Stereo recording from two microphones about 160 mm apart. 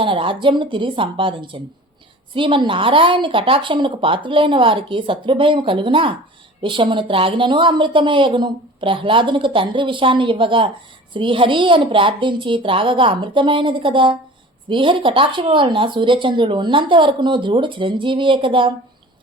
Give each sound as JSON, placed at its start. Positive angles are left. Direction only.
{"t": 0.0, "sound": "a woman's voice", "side_deg": -30}